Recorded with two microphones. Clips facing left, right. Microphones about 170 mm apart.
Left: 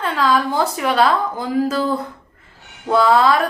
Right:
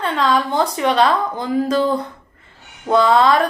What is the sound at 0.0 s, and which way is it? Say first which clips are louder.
A woman's voice: even; 5° left (ahead or behind).